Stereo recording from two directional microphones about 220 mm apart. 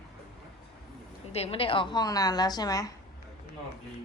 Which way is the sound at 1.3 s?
25° left (ahead or behind).